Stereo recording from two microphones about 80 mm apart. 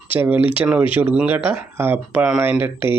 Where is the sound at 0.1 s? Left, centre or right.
Centre.